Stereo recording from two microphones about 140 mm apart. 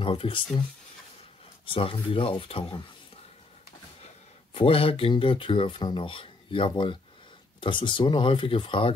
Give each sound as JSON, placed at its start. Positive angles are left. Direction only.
{"t": 0.0, "sound": "speech", "side_deg": 40}
{"t": 1.7, "sound": "speech", "side_deg": 40}
{"t": 4.6, "sound": "speech", "side_deg": 40}